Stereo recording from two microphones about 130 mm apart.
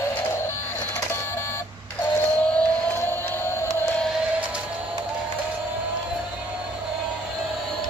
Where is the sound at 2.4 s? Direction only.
10° left (ahead or behind).